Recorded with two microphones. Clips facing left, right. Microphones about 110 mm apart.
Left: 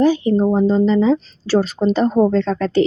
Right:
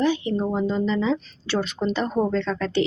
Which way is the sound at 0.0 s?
40° left (ahead or behind).